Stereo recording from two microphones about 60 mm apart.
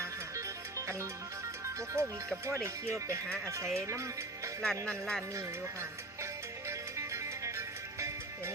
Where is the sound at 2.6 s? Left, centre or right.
Right.